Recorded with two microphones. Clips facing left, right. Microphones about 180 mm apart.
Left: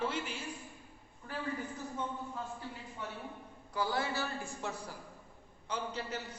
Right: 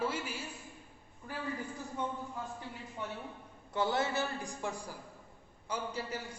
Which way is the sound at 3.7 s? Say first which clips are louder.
Right 3 dB; 25° right (ahead or behind).